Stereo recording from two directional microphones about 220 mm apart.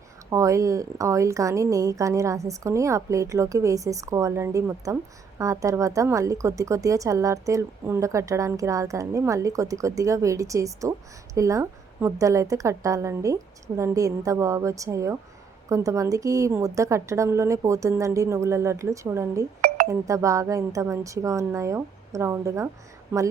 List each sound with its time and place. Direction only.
0.3 s speech: 15° right (ahead or behind)
19.6 s chink: 40° right (ahead or behind)
19.9 s speech: 15° right (ahead or behind)